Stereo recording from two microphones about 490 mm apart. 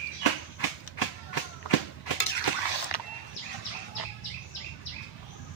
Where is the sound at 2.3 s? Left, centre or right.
Left.